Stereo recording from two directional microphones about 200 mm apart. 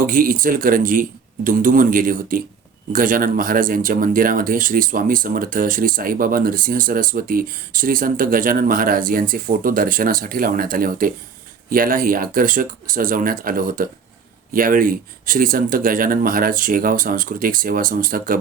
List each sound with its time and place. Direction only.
0.0 s speech: 45° right (ahead or behind)